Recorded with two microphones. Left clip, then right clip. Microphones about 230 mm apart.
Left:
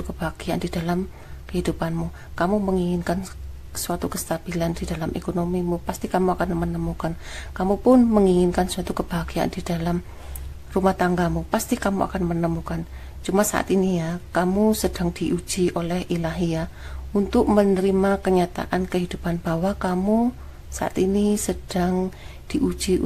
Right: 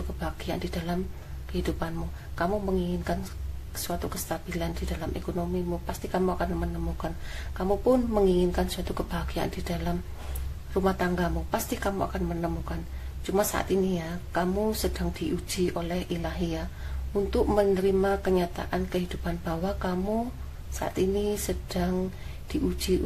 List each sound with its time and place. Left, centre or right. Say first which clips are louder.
0.2 s speech: left 6 dB; left